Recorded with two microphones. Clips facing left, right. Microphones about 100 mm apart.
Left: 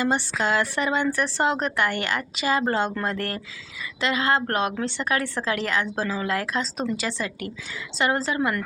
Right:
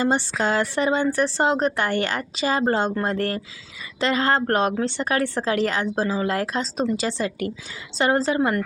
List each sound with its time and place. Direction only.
0.0 s a woman's voice: 30° right (ahead or behind)
4.0 s a woman's voice: 40° right (ahead or behind)